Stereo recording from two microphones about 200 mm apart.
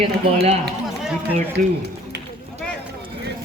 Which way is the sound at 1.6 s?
40° right (ahead or behind).